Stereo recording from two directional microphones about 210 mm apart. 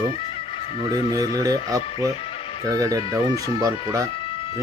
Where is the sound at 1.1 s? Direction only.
15° right (ahead or behind).